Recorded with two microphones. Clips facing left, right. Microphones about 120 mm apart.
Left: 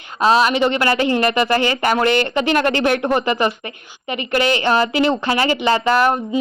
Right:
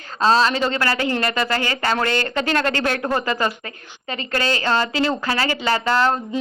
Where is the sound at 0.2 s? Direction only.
10° left (ahead or behind).